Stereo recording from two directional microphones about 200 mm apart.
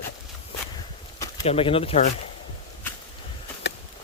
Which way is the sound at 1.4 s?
30° left (ahead or behind).